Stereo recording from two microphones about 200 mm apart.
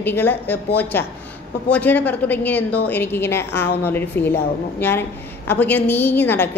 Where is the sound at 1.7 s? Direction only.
10° left (ahead or behind).